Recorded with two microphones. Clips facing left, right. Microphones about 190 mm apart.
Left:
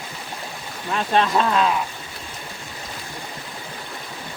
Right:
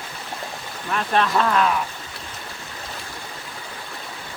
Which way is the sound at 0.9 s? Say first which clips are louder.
Left 1 dB; 25° left (ahead or behind).